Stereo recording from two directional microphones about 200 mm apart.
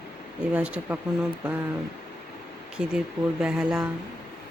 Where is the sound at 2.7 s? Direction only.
5° right (ahead or behind).